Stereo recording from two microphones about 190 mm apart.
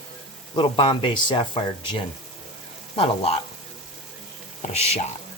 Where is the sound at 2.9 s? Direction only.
30° left (ahead or behind).